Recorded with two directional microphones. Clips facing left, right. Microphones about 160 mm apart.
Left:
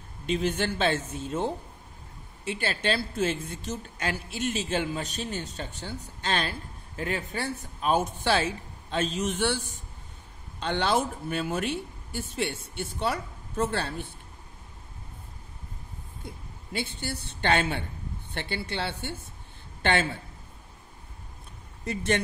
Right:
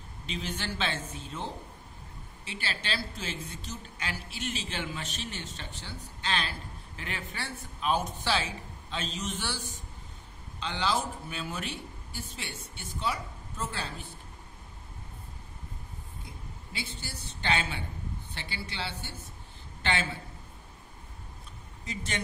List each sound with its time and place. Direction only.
0.3 s a woman's voice: 55° left (ahead or behind)
16.7 s speech: 60° left (ahead or behind)
21.8 s speech: 60° left (ahead or behind)